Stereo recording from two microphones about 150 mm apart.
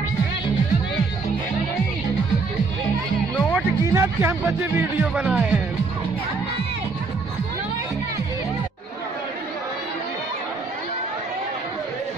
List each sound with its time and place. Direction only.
3.3 s music: 5° left (ahead or behind)
3.8 s a sound: 20° right (ahead or behind)
4.5 s speech: 10° right (ahead or behind)